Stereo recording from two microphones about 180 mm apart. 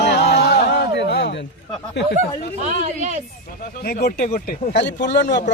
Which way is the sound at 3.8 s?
60° left (ahead or behind).